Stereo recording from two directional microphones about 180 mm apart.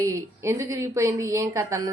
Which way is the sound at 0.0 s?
15° right (ahead or behind).